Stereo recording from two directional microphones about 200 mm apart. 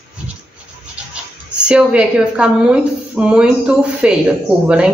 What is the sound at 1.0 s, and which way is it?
Rub, 5° right (ahead or behind).